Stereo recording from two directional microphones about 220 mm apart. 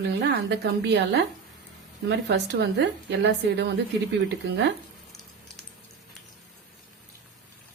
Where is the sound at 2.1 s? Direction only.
50° right (ahead or behind).